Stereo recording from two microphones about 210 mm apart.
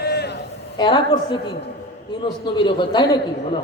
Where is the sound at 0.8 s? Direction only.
20° left (ahead or behind).